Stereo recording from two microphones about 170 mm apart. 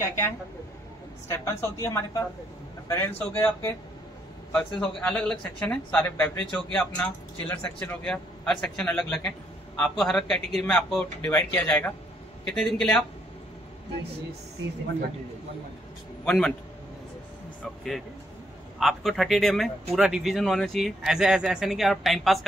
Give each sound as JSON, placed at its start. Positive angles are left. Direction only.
{"t": 0.0, "sound": "a woman's voice", "side_deg": 15}
{"t": 1.3, "sound": "a woman's voice", "side_deg": 15}
{"t": 16.3, "sound": "speech", "side_deg": 5}
{"t": 18.8, "sound": "speech", "side_deg": 0}